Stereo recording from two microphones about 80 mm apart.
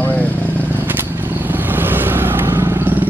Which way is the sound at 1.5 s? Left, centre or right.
Right.